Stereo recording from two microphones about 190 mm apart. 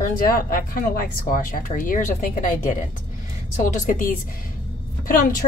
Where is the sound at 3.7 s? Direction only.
45° left (ahead or behind).